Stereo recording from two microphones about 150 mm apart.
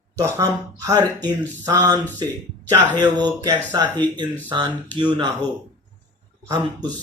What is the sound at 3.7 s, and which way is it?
Speech, 30° right (ahead or behind).